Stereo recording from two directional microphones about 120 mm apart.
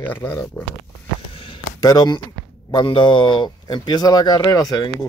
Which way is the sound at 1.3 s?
45° left (ahead or behind).